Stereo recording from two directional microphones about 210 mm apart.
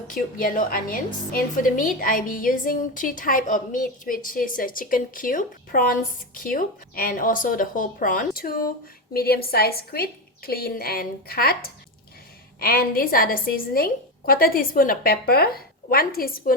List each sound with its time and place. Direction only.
0.1 s a woman's voice: 40° left (ahead or behind)
12.5 s a woman's voice: 45° left (ahead or behind)